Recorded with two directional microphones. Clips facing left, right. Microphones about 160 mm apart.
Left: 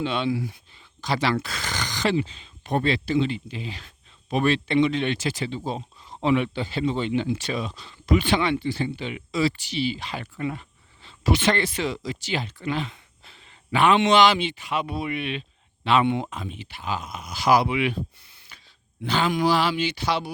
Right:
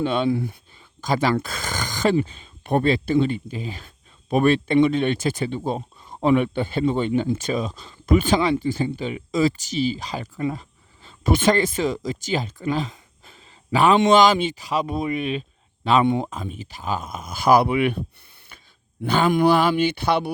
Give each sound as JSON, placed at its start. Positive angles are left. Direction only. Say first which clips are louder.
{"t": 0.0, "sound": "speech", "louder": "right 4 dB", "side_deg": -50}
{"t": 19.0, "sound": "speech", "louder": "right 5 dB", "side_deg": -50}